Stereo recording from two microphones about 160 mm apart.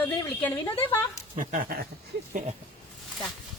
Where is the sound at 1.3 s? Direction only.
55° right (ahead or behind).